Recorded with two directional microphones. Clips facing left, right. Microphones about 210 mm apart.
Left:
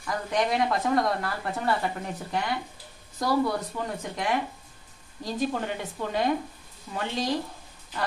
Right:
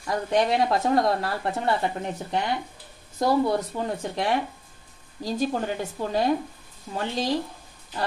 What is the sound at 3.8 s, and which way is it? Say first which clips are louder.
A woman's voice: right 4 dB; 30° right (ahead or behind).